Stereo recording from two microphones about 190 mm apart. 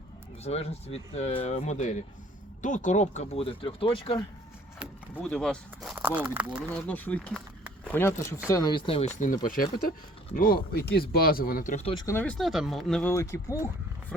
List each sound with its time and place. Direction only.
0.4 s speech: 35° left (ahead or behind)
5.1 s speech: 5° left (ahead or behind)
5.9 s speech: 10° right (ahead or behind)
6.7 s speech: 10° left (ahead or behind); by 9.0 s 25° left (ahead or behind)
9.1 s speech: 45° left (ahead or behind)
12.0 s speech: 10° left (ahead or behind)